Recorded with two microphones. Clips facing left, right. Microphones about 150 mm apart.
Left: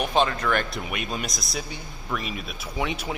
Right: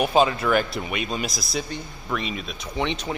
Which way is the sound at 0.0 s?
5° right (ahead or behind).